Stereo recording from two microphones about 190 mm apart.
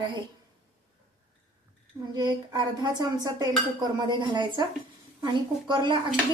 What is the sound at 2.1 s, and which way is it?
Speech, 20° right (ahead or behind).